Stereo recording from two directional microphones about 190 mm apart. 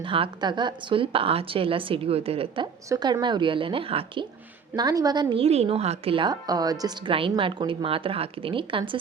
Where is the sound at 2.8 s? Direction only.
20° right (ahead or behind).